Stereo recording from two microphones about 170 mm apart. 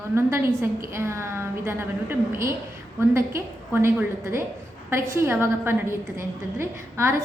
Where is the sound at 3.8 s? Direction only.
15° right (ahead or behind).